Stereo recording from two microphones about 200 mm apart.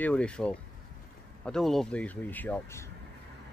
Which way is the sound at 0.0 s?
5° left (ahead or behind).